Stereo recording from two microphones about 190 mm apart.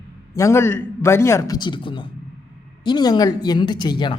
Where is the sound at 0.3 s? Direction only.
15° left (ahead or behind).